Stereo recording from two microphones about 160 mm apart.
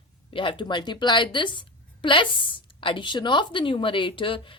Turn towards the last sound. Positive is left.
turn(degrees=30)  # may be behind; listen again after turning